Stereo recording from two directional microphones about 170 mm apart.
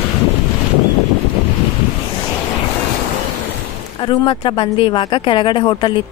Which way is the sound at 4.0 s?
30° left (ahead or behind).